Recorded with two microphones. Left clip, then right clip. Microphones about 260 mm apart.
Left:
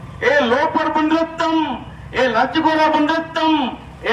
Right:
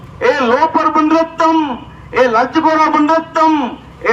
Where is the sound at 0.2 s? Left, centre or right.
Centre.